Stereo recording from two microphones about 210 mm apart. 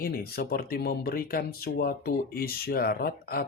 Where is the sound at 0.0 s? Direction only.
45° left (ahead or behind).